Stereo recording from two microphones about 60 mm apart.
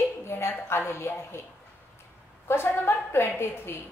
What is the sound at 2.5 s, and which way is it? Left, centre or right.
A woman's voice, left.